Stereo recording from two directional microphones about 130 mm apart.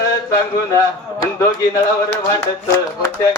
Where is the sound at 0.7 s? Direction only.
20° left (ahead or behind).